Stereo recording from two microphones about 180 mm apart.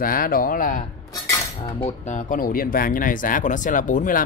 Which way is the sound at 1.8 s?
45° left (ahead or behind).